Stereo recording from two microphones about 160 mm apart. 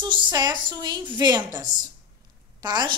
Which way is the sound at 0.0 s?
30° right (ahead or behind).